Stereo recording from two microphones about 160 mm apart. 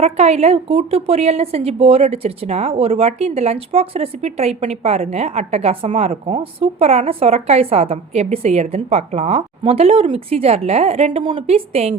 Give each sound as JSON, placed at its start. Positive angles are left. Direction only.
{"t": 0.0, "sound": "a woman's voice", "side_deg": -40}